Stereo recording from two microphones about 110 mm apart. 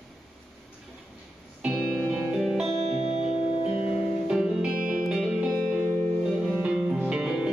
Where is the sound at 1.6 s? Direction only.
5° right (ahead or behind).